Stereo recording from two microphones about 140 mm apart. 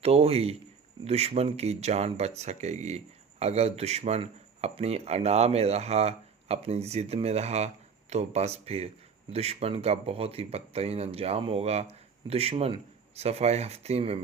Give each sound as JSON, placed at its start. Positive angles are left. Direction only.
{"t": 0.0, "sound": "speech", "side_deg": -45}